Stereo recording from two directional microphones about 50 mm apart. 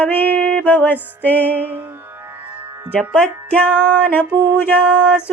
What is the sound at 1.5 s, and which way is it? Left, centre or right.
Music, right.